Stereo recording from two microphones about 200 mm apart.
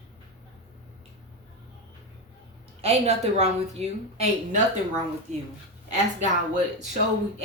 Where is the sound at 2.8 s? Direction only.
30° right (ahead or behind).